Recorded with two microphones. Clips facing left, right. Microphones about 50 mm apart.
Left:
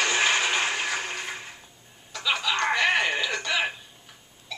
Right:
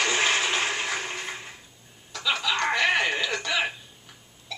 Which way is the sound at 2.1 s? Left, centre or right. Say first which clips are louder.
Even; centre.